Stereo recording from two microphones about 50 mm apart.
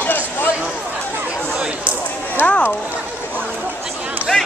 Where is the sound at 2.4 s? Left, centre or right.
Left.